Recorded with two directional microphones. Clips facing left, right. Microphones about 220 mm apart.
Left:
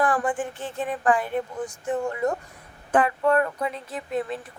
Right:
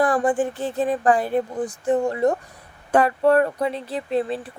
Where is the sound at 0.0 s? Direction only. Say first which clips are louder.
Right 5 dB; 35° right (ahead or behind).